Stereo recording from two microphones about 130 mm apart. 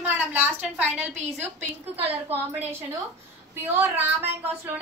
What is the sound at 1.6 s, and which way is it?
Speech, 50° right (ahead or behind).